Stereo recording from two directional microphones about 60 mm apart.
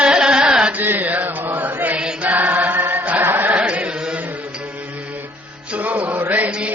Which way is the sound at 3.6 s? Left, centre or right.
Centre.